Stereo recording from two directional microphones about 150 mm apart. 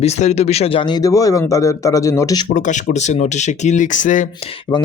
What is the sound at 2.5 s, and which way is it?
Speech, 55° left (ahead or behind).